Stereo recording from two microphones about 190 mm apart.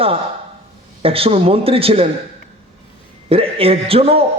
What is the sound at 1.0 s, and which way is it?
A man's voice, 30° right (ahead or behind).